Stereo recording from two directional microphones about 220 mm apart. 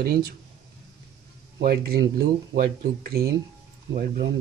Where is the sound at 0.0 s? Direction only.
45° right (ahead or behind).